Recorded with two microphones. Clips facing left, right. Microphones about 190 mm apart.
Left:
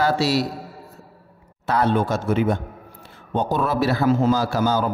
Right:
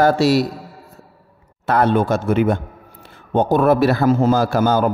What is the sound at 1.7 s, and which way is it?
A man's voice, 55° right (ahead or behind).